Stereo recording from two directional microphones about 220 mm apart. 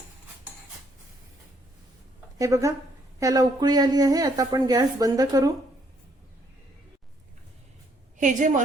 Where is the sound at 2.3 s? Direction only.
15° right (ahead or behind).